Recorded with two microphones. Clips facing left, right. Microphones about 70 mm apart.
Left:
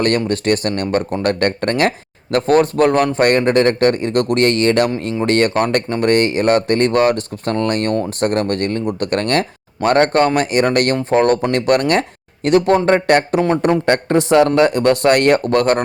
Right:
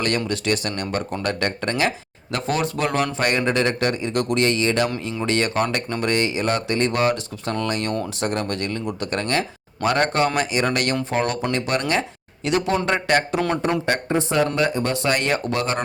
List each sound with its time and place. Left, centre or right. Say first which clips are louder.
0.3 s speech: left 6 dB; left
13.8 s speech: left 7 dB; left